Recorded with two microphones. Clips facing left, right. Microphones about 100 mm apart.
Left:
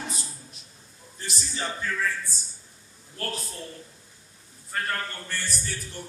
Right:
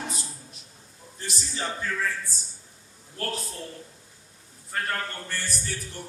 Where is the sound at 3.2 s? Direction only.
35° right (ahead or behind).